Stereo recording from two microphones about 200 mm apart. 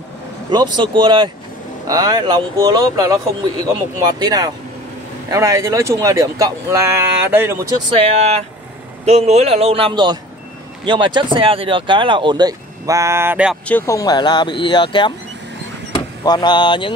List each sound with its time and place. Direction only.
0.5 s speech: 20° right (ahead or behind)
7.9 s a man's voice: 30° right (ahead or behind); by 13.6 s 10° right (ahead or behind)
13.7 s speech: 10° left (ahead or behind)